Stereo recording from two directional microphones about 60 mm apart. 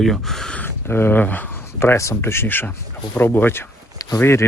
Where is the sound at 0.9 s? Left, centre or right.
Left.